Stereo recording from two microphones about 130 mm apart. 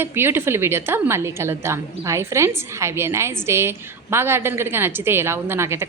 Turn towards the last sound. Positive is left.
turn(degrees=-20)  # may be behind; listen again after turning